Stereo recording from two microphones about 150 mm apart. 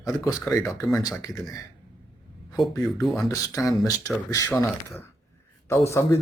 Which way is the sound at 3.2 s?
20° left (ahead or behind).